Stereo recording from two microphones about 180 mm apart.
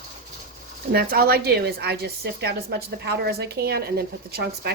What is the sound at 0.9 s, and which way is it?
A woman's voice, 60° right (ahead or behind).